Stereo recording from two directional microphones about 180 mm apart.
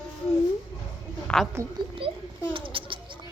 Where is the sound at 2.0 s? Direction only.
30° right (ahead or behind).